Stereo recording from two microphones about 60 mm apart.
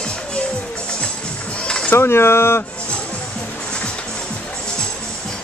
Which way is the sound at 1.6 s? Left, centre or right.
Centre.